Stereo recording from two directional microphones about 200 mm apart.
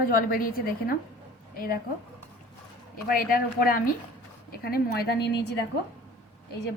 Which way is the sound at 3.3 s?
45° left (ahead or behind).